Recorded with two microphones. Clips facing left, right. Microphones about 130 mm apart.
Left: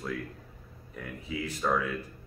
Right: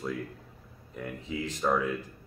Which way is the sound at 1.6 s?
15° right (ahead or behind).